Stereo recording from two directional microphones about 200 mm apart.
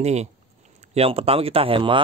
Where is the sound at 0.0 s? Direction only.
35° right (ahead or behind).